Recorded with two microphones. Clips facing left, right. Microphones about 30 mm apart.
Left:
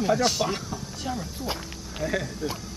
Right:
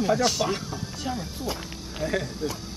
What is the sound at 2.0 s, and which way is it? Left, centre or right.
Speech, centre.